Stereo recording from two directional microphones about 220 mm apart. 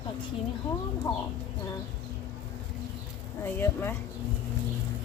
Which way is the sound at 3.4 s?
10° left (ahead or behind).